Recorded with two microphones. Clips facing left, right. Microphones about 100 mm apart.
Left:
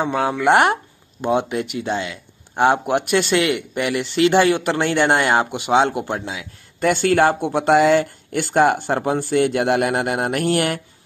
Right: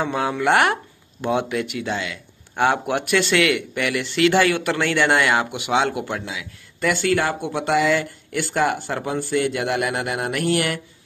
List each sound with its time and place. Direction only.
0.0 s speech: 25° left (ahead or behind)